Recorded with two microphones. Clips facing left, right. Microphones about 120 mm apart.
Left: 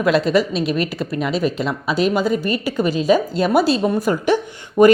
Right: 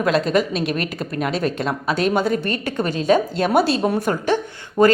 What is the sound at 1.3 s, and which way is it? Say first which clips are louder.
Speech: left 1 dB; centre (ahead or behind).